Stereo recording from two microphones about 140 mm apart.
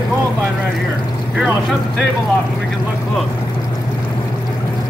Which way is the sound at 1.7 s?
Centre (ahead or behind).